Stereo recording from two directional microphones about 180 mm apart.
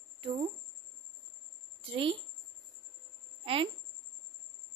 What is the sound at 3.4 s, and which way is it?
Speech, 30° right (ahead or behind).